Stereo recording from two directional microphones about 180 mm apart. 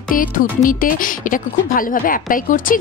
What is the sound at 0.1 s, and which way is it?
A woman's voice, 50° left (ahead or behind).